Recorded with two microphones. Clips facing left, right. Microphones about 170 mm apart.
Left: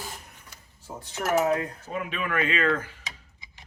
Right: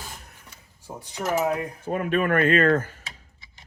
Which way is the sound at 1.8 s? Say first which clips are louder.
Right 13 dB; 50° right (ahead or behind).